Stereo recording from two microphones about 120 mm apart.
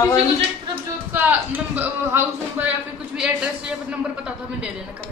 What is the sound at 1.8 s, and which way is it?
Speech, 15° right (ahead or behind).